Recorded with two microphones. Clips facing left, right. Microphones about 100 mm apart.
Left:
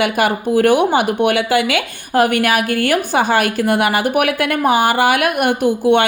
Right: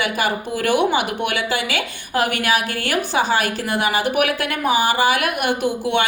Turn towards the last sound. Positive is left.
turn(degrees=50)  # may be behind; listen again after turning